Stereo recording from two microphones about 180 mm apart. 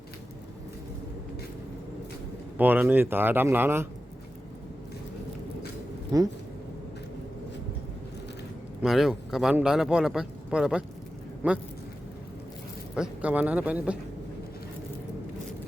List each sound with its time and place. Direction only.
2.6 s speech: 10° right (ahead or behind)
6.1 s speech: 20° right (ahead or behind)
8.8 s speech: centre (ahead or behind)
13.0 s speech: 5° right (ahead or behind)